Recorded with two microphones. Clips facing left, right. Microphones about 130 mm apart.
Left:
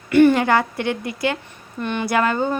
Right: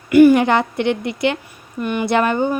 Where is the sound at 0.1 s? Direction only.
10° right (ahead or behind).